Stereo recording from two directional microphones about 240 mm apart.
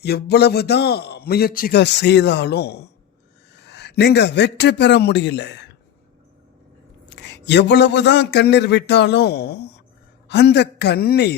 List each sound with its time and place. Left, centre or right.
0.0 s a man's voice: left
7.2 s a man's voice: left